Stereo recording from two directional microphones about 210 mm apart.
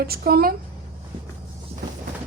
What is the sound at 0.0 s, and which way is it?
Speech, 45° right (ahead or behind).